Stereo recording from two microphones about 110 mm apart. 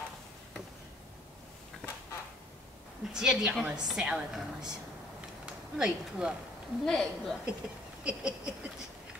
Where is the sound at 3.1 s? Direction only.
5° right (ahead or behind).